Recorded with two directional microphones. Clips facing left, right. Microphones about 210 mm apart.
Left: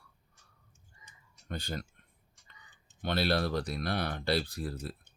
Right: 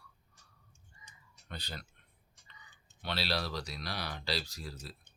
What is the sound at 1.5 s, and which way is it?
Speech, 45° left (ahead or behind).